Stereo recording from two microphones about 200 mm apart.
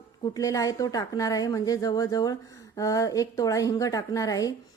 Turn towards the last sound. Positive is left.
turn(degrees=15)  # may be behind; listen again after turning